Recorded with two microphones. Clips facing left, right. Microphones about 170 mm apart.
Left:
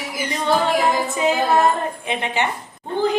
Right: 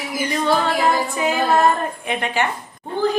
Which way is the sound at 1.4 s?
20° left (ahead or behind).